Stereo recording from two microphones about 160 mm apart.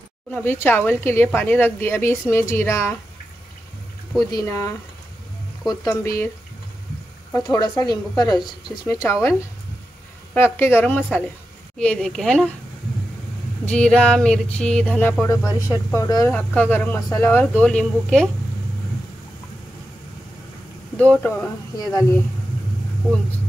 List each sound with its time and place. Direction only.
0.3 s speech: 15° left (ahead or behind)
4.3 s a woman's voice: 20° left (ahead or behind)
7.3 s speech: 15° left (ahead or behind)
7.6 s a woman's voice: 25° left (ahead or behind)
10.3 s speech: 15° left (ahead or behind)
11.8 s a sound: 5° left (ahead or behind)
13.7 s a sound: 5° left (ahead or behind)
15.7 s a woman's voice: 20° left (ahead or behind)
16.3 s speech: 10° left (ahead or behind)
20.9 s speech: 10° left (ahead or behind)
21.7 s a woman's voice: 20° left (ahead or behind)